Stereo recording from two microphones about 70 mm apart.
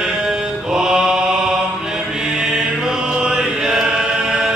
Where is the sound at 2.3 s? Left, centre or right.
Centre.